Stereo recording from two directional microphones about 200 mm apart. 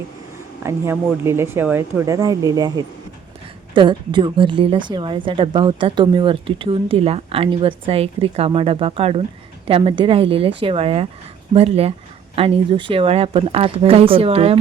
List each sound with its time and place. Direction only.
0.6 s a woman's voice: 15° right (ahead or behind); by 14.6 s 30° right (ahead or behind)